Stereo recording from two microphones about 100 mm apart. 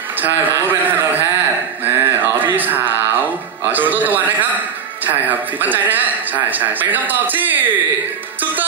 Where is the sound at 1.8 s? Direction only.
20° right (ahead or behind).